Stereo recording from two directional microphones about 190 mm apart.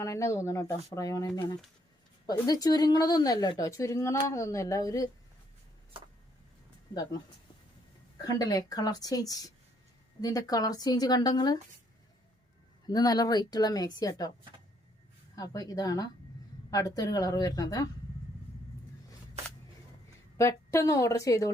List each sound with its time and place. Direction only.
0.0 s a woman's voice: 15° left (ahead or behind)
8.2 s a woman's voice: 20° left (ahead or behind)
12.9 s a woman's voice: 20° left (ahead or behind)
15.4 s a woman's voice: 20° left (ahead or behind)
20.3 s a woman's voice: 15° left (ahead or behind)